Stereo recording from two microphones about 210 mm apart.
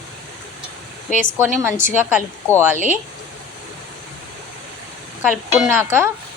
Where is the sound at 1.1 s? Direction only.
35° left (ahead or behind).